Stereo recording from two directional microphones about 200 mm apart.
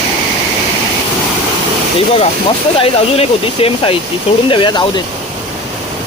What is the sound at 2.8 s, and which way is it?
Speech, 30° left (ahead or behind).